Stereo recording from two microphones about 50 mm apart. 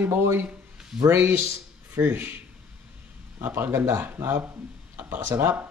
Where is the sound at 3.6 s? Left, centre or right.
Right.